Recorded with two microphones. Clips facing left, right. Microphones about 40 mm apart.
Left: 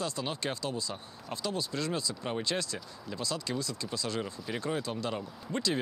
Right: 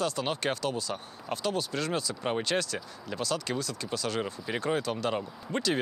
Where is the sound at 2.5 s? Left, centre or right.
Right.